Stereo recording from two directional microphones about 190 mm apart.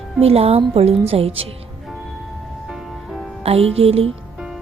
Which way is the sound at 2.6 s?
Centre (ahead or behind).